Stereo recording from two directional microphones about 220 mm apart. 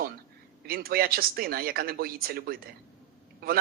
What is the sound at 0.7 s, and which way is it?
Speech, 45° right (ahead or behind).